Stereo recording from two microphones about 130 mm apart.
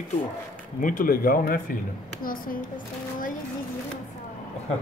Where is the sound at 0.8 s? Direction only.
90° left.